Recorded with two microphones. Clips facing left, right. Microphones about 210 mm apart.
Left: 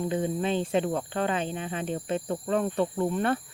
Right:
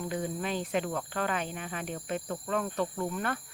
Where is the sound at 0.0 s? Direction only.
25° left (ahead or behind).